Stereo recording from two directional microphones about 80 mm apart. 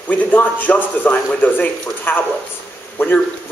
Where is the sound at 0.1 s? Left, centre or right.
Centre.